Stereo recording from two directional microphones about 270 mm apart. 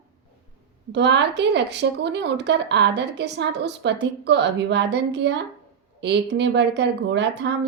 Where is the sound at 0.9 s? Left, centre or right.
Right.